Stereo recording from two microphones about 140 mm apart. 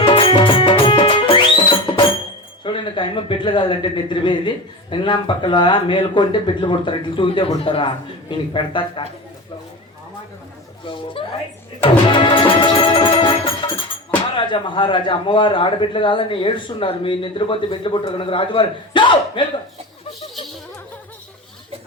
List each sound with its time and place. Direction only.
0.0 s music: 40° left (ahead or behind)
2.6 s a man's voice: 35° left (ahead or behind)
10.8 s a man's voice: 40° left (ahead or behind)